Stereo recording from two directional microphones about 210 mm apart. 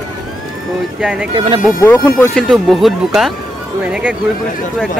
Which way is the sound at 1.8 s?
15° left (ahead or behind).